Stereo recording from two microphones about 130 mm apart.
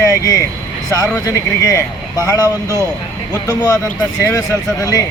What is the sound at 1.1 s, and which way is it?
Speech, 25° left (ahead or behind).